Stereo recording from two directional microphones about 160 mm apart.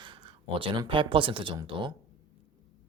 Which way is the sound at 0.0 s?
35° right (ahead or behind).